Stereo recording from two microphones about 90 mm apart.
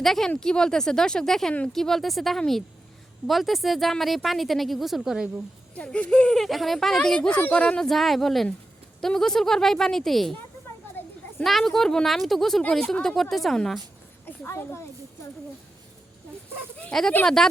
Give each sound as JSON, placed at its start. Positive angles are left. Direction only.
{"t": 0.0, "sound": "speech", "side_deg": 0}
{"t": 5.7, "sound": "speech", "side_deg": 15}
{"t": 7.9, "sound": "speech", "side_deg": 0}
{"t": 11.4, "sound": "speech", "side_deg": 0}
{"t": 14.3, "sound": "a woman's voice", "side_deg": 25}
{"t": 16.9, "sound": "speech", "side_deg": 5}